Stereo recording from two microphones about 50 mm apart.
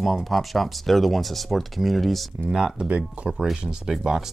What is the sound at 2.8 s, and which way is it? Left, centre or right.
Speech, right.